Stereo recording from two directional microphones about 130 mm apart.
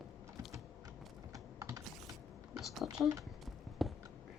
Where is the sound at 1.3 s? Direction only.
25° right (ahead or behind).